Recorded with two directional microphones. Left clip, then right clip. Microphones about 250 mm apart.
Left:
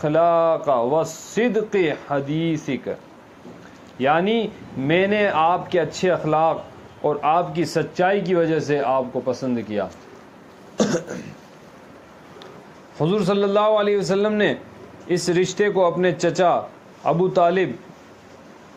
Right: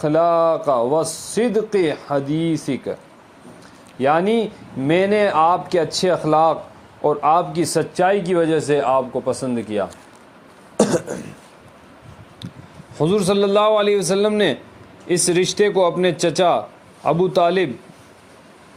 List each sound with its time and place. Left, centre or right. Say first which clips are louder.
0.0 s speech: right 1 dB; right
13.0 s speech: right 3 dB; right